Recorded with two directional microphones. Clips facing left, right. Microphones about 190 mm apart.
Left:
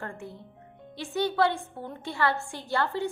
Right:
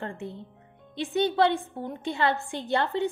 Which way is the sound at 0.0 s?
20° right (ahead or behind).